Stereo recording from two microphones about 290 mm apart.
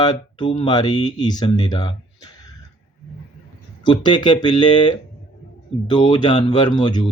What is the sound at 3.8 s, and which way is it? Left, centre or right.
Speech, centre.